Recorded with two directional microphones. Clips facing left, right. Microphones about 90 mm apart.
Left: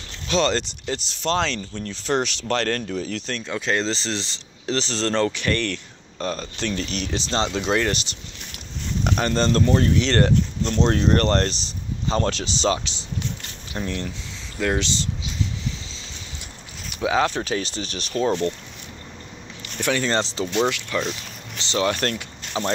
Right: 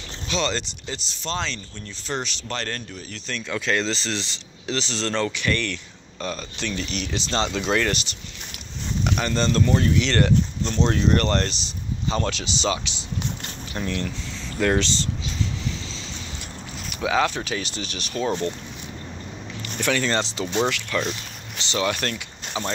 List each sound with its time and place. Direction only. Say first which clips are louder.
0.3 s speech: left 5 dB; 45° left (ahead or behind); by 3.3 s 90° left
3.4 s speech: even; 25° left (ahead or behind)
7.2 s speech: left 1 dB; 25° left (ahead or behind)
9.0 s speech: left 2 dB; 40° left (ahead or behind)
13.7 s speech: even; 20° left (ahead or behind)
14.6 s speech: right 2 dB; 10° left (ahead or behind)
16.9 s speech: left 1 dB; 25° left (ahead or behind)
19.8 s speech: left 1 dB; 20° left (ahead or behind)
21.6 s speech: left 2 dB; 30° left (ahead or behind)